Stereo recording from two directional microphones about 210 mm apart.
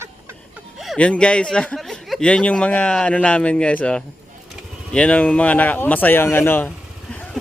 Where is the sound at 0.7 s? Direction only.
Centre (ahead or behind).